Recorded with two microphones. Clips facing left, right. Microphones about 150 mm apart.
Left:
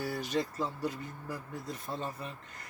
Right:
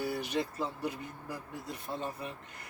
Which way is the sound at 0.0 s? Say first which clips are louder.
Even; 15° right (ahead or behind).